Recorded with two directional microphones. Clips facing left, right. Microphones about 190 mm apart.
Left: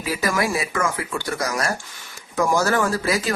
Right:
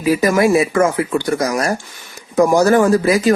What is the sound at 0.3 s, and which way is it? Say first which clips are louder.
Speech: right 10 dB; 25° right (ahead or behind).